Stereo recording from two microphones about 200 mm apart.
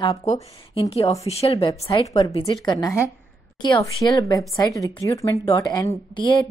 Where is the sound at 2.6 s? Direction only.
15° left (ahead or behind).